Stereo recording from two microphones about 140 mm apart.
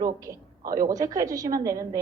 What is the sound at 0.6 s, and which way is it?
Speech, 80° right.